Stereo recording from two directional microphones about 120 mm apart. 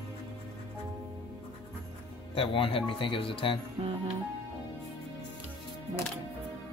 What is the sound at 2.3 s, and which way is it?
Speech, 50° left (ahead or behind).